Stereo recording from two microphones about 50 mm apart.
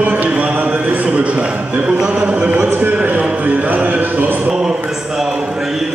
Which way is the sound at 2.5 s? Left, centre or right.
Right.